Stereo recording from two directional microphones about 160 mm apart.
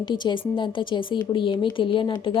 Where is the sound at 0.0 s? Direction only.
30° left (ahead or behind).